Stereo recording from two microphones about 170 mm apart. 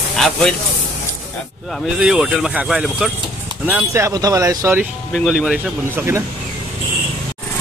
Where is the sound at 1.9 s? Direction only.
5° right (ahead or behind).